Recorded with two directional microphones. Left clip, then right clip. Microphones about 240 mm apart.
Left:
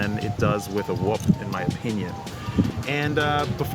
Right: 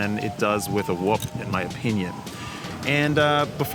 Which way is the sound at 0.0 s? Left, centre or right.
Centre.